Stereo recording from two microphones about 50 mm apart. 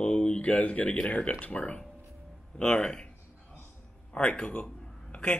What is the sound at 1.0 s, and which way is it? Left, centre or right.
Speech, left.